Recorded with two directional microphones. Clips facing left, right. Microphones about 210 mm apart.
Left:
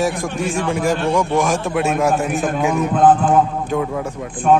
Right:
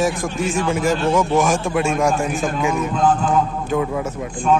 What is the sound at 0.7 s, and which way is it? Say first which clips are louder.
A man's voice: even; centre (ahead or behind).